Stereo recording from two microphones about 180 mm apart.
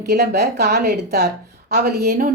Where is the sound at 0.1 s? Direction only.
65° right (ahead or behind).